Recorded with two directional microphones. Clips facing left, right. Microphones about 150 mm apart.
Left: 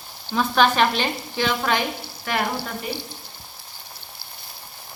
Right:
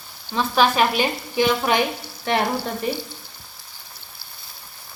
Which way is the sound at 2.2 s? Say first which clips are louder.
Right 4 dB; 30° right (ahead or behind).